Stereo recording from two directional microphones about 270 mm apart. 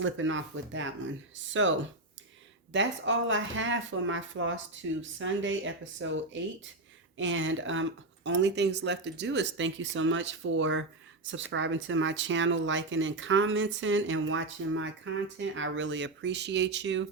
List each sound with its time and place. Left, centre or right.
0.0 s speech: right
2.7 s speech: right